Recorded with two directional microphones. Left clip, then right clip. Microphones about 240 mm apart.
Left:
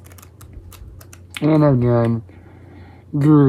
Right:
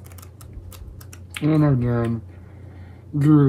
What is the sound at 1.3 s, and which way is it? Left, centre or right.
Speech, left.